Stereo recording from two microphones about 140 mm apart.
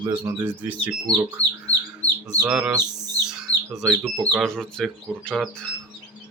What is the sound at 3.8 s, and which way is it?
Speech, 5° right (ahead or behind).